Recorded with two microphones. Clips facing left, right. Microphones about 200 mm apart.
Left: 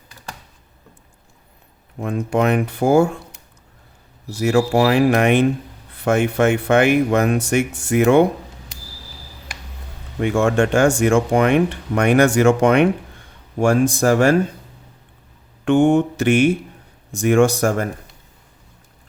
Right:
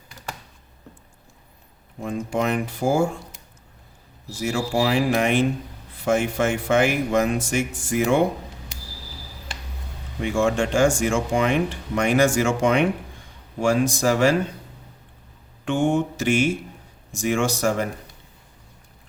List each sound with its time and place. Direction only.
2.0 s speech: 60° left (ahead or behind)
4.3 s speech: 65° left (ahead or behind)
10.2 s speech: 60° left (ahead or behind)
15.6 s speech: 60° left (ahead or behind)